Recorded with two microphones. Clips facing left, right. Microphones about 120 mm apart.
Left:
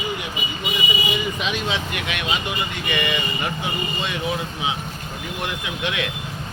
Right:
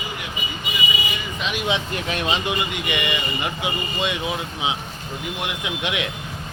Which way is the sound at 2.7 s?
15° right (ahead or behind).